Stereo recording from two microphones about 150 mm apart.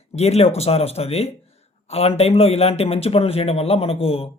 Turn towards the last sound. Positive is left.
turn(degrees=40)  # may be behind; listen again after turning